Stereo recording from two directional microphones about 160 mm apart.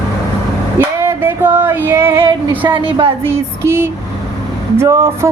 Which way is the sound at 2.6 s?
30° right (ahead or behind).